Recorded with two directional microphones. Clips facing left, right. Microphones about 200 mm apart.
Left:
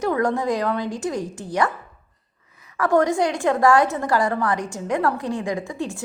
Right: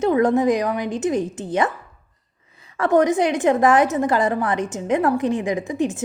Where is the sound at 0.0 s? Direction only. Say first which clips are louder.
Right 5 dB; 20° right (ahead or behind).